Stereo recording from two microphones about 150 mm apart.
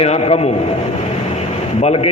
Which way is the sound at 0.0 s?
40° left (ahead or behind).